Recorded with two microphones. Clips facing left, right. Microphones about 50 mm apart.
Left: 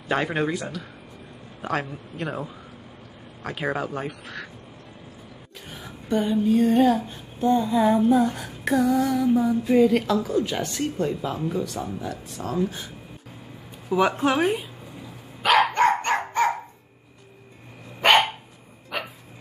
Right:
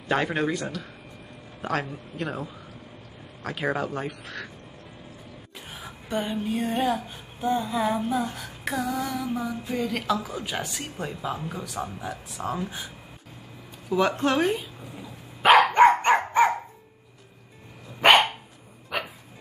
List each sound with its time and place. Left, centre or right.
0.1 s a sound: centre
1.6 s a man's voice: centre
3.4 s a sound: centre
5.7 s a sound: centre
9.5 s speech: centre
10.1 s speech: centre
11.8 s speech: centre
13.8 s speech: centre
15.7 s dog: centre
18.9 s dog: centre